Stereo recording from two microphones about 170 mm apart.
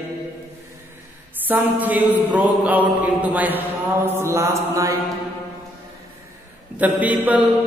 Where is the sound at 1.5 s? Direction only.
10° right (ahead or behind).